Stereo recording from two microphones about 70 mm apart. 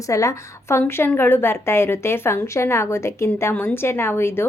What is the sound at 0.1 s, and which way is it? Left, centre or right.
A woman's voice, left.